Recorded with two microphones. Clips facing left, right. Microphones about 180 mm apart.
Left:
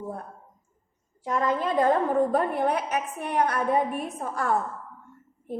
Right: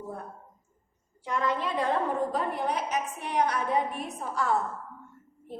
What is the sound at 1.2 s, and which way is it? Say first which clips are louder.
A woman's voice: left 3 dB; 45° left (ahead or behind).